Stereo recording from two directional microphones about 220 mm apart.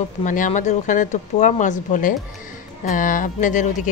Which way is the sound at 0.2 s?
35° left (ahead or behind).